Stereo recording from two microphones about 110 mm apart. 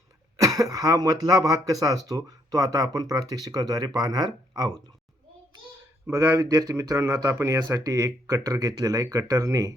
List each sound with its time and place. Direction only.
0.3 s speech: 30° right (ahead or behind)
6.1 s speech: 25° right (ahead or behind)